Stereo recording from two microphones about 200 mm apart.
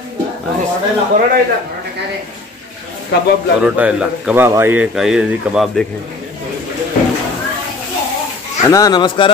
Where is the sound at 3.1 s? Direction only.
55° left (ahead or behind).